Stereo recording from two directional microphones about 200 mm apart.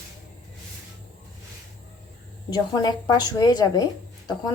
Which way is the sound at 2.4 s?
20° left (ahead or behind).